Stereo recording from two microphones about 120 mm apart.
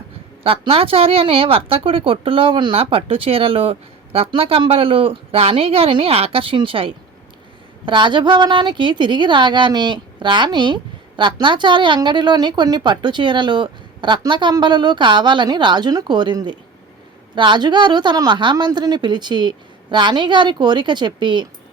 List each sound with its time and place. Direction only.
0.4 s speech: 50° right (ahead or behind)